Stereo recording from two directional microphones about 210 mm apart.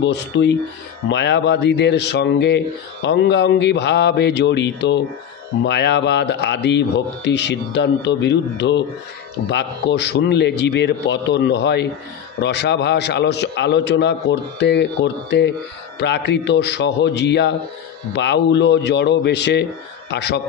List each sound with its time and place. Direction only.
0.0 s a man's voice: 55° left (ahead or behind)